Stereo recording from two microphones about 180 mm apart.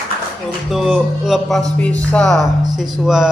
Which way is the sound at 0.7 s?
Centre (ahead or behind).